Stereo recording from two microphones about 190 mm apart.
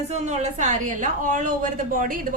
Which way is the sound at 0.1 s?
40° right (ahead or behind).